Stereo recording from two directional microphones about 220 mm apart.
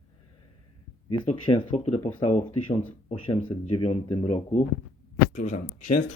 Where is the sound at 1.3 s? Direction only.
25° left (ahead or behind).